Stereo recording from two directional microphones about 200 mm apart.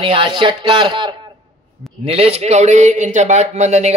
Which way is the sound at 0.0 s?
25° right (ahead or behind).